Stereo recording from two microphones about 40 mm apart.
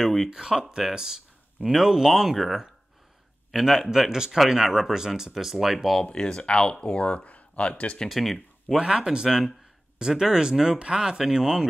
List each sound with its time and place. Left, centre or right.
0.3 s speech: centre
0.8 s a sound: centre
1.7 s speech: centre
6.0 s speech: left
8.1 s speech: centre
8.7 s speech: centre